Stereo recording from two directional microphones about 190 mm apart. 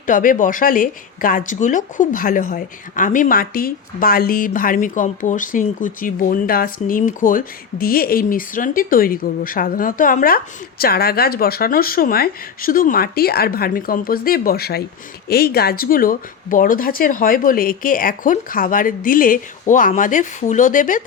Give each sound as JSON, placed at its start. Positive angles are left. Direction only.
{"t": 0.0, "sound": "speech", "side_deg": 45}